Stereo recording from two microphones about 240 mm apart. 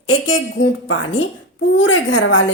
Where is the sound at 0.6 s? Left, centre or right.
Left.